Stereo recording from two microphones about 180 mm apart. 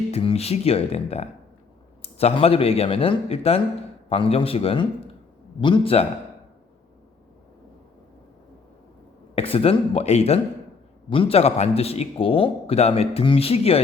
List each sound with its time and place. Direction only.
0.1 s a man's voice: 35° left (ahead or behind)
9.3 s a man's voice: 30° left (ahead or behind)